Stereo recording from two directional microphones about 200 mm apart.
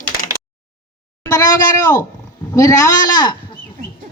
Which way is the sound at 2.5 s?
15° left (ahead or behind).